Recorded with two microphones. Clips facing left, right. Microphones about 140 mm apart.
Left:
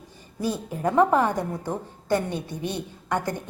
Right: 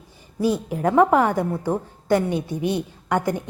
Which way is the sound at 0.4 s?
15° right (ahead or behind).